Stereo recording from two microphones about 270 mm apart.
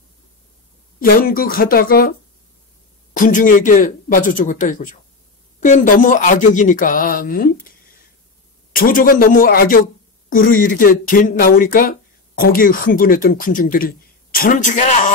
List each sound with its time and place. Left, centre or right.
0.9 s speech: left
3.2 s speech: left
8.7 s speech: left